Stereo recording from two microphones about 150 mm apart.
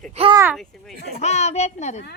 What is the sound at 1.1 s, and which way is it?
Speech, 50° left (ahead or behind).